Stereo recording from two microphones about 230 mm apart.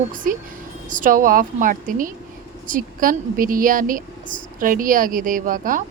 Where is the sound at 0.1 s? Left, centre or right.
Right.